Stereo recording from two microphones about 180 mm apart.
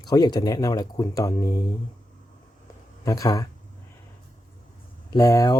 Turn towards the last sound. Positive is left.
turn(degrees=20)  # may be behind; listen again after turning